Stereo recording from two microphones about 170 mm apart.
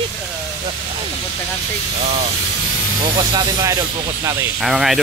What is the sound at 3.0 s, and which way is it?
Speech, 25° right (ahead or behind).